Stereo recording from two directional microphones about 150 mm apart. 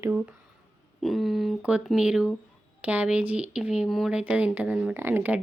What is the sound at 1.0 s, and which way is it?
Speech, centre (ahead or behind).